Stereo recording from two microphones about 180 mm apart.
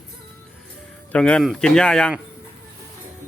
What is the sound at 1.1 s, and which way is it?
Speech, 5° left (ahead or behind).